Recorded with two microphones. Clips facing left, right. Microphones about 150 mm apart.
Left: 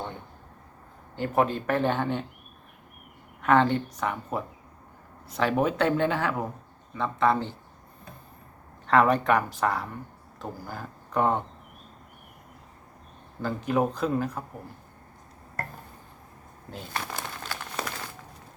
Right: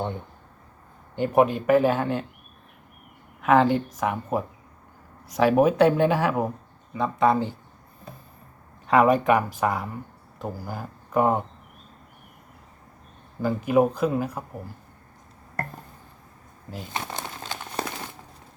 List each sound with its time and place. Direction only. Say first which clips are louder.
1.1 s speech: right 5 dB; 15° right (ahead or behind)
3.4 s a woman's voice: right 3 dB; 5° right (ahead or behind)
8.9 s speech: right 3 dB; 10° right (ahead or behind)
13.4 s speech: right 5 dB; 10° right (ahead or behind)
16.9 s crumpling: right 1 dB; 20° right (ahead or behind)